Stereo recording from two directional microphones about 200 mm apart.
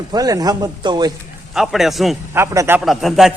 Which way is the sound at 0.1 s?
20° right (ahead or behind).